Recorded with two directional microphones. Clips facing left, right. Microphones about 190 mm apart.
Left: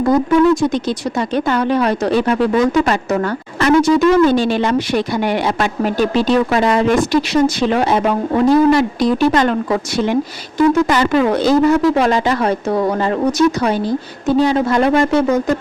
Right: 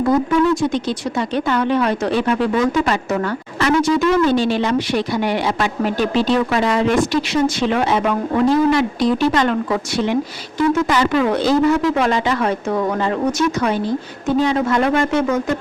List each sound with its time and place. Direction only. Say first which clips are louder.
0.0 s speech: left 3 dB; 40° left (ahead or behind)